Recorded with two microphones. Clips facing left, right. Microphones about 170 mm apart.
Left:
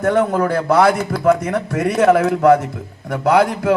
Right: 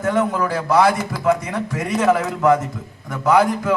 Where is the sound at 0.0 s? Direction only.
60° left (ahead or behind).